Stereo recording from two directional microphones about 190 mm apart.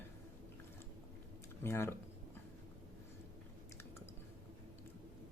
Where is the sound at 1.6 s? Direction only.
15° left (ahead or behind).